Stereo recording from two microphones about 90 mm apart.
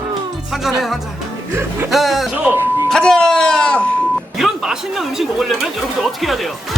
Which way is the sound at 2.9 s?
10° left (ahead or behind).